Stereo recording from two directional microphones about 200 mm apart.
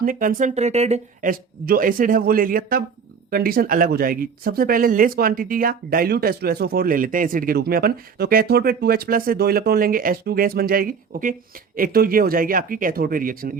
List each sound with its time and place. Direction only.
0.0 s speech: 45° right (ahead or behind)